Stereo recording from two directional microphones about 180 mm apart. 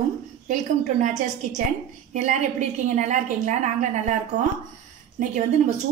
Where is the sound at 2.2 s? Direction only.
40° right (ahead or behind).